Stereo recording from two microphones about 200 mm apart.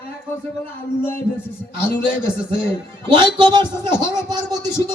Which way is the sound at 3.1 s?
20° right (ahead or behind).